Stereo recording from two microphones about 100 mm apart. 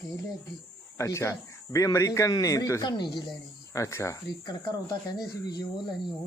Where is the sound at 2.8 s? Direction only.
50° left (ahead or behind).